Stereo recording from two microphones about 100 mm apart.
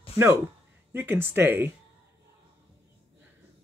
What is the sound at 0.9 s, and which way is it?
Speech, 20° right (ahead or behind).